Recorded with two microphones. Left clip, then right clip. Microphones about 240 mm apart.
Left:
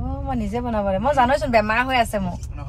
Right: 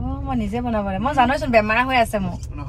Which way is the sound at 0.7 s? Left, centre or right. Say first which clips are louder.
Left 1 dB; left.